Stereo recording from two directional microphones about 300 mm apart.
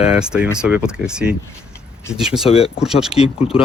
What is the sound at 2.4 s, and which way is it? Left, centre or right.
Speech, centre.